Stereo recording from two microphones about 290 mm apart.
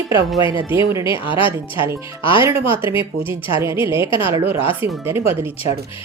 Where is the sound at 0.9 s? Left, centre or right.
Centre.